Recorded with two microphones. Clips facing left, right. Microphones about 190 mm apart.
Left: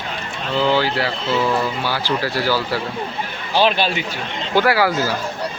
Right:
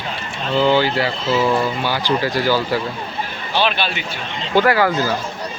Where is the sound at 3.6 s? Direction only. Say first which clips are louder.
Left 3 dB; 40° left (ahead or behind).